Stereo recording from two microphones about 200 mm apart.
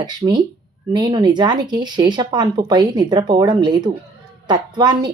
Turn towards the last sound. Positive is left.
turn(degrees=-20)  # may be behind; listen again after turning